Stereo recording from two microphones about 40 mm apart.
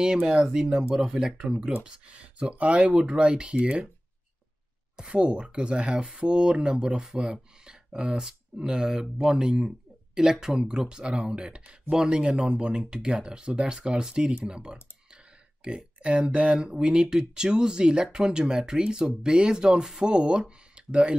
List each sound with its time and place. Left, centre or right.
0.0 s speech: centre
5.0 s speech: right